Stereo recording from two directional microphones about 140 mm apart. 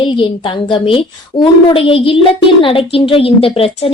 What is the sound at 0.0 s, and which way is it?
A woman's voice, 35° left (ahead or behind).